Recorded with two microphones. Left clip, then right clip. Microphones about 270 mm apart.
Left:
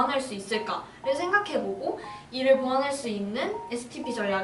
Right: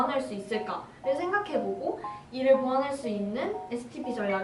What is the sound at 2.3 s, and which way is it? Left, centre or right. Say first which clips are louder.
A woman's voice: left 1 dB; centre.